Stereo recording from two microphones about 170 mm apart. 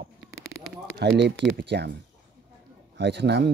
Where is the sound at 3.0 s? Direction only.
85° right.